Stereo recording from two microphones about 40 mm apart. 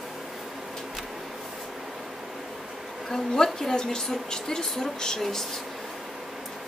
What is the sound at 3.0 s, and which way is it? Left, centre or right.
A woman's voice, centre.